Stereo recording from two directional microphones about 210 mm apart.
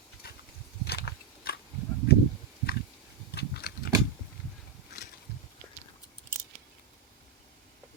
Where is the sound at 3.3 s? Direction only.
50° left (ahead or behind).